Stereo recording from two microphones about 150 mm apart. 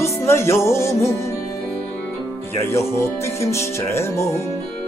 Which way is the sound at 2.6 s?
15° left (ahead or behind).